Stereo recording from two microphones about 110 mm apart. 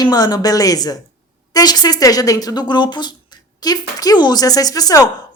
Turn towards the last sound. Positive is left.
turn(degrees=35)  # may be behind; listen again after turning